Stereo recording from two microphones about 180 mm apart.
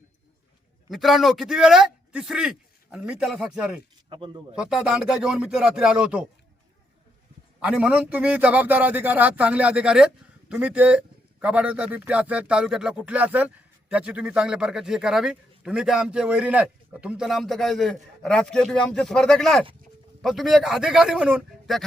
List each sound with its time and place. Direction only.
0.9 s speech: centre (ahead or behind)
4.1 s a man's voice: 25° right (ahead or behind)
4.5 s speech: 5° right (ahead or behind)
7.6 s a man's voice: 5° right (ahead or behind)